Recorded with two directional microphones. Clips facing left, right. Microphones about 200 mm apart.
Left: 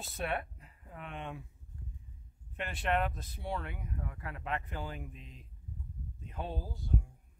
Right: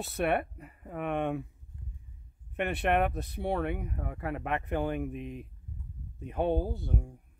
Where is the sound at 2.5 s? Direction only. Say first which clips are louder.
Right 6 dB; 60° right (ahead or behind).